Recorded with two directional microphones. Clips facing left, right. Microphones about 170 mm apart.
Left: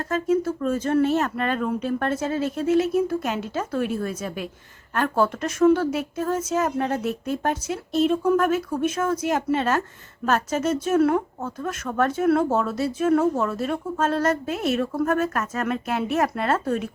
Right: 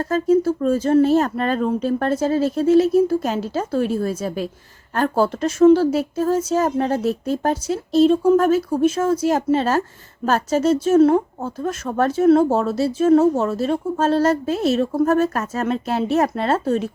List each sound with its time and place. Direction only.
0.0 s speech: 35° right (ahead or behind)